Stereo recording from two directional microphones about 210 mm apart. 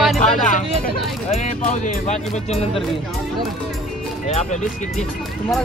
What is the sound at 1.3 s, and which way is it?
Speech, 35° left (ahead or behind).